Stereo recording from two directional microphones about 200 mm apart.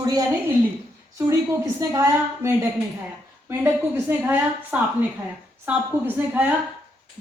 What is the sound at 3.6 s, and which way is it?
A woman's voice, 10° right (ahead or behind).